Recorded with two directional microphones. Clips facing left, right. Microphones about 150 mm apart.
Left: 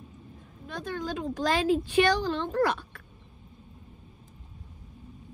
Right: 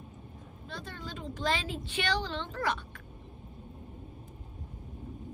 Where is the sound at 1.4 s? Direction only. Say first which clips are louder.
Left 8 dB; 45° left (ahead or behind).